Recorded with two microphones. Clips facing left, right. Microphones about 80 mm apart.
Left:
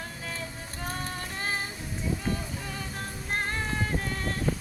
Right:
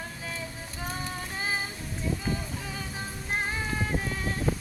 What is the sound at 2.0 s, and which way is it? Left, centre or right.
Music, centre.